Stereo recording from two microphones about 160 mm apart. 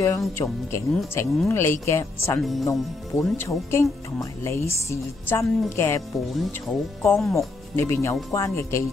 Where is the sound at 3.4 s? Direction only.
15° left (ahead or behind).